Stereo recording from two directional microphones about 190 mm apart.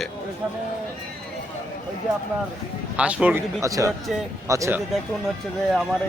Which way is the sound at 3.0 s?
5° right (ahead or behind).